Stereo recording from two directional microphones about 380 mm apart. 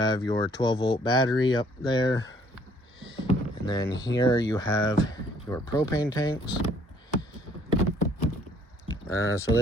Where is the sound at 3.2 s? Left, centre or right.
Centre.